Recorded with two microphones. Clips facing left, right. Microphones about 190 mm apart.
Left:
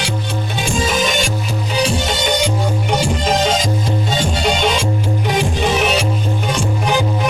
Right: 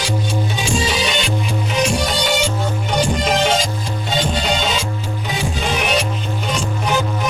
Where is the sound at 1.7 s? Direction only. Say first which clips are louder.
Left 1 dB; 30° left (ahead or behind).